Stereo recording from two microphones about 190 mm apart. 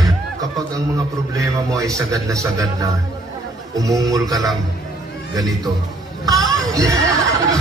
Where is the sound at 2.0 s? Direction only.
15° right (ahead or behind).